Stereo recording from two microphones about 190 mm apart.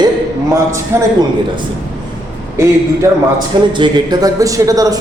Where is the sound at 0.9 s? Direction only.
15° right (ahead or behind).